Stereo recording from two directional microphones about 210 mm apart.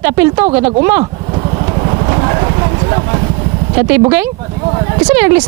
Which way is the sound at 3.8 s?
10° right (ahead or behind).